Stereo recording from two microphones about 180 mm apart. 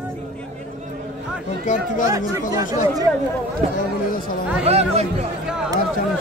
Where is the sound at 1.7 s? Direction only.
45° left (ahead or behind).